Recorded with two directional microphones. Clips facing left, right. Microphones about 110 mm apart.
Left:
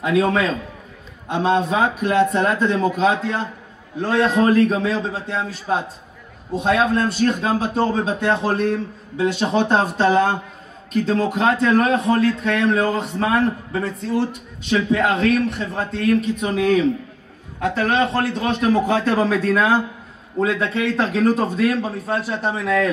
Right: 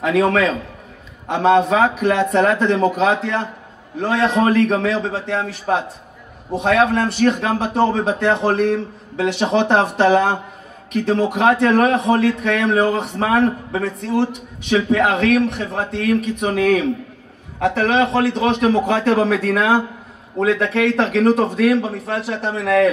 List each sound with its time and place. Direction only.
0.0 s a man's voice: 75° right (ahead or behind)